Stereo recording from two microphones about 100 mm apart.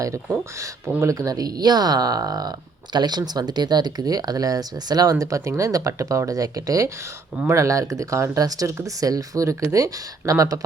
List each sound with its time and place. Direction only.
0.9 s speech: 35° right (ahead or behind)